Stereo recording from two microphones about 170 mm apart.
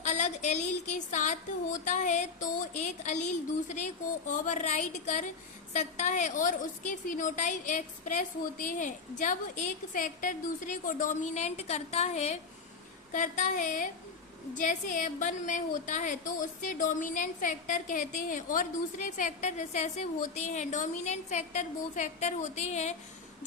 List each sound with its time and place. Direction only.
0.0 s a woman's voice: 45° left (ahead or behind)